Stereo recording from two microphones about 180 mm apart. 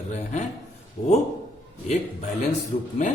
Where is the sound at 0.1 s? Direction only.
40° left (ahead or behind).